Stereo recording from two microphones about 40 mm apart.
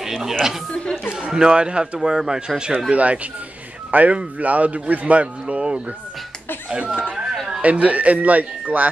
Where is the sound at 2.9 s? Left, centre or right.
Right.